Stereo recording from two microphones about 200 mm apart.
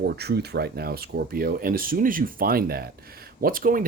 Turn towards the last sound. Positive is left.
turn(degrees=-45)  # may be behind; listen again after turning